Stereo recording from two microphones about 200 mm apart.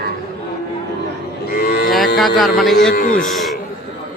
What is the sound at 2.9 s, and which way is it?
Cattle, 45° left (ahead or behind).